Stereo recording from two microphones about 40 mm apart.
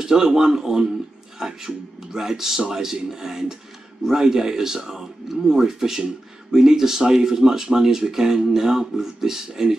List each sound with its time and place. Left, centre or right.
0.0 s speech: centre